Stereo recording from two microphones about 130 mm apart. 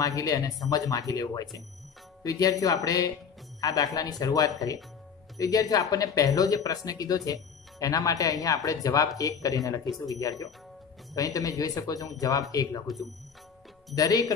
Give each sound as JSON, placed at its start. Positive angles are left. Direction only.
{"t": 0.0, "sound": "speech", "side_deg": 25}
{"t": 13.9, "sound": "speech", "side_deg": 30}